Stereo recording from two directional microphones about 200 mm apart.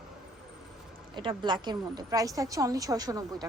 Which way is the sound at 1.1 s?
25° right (ahead or behind).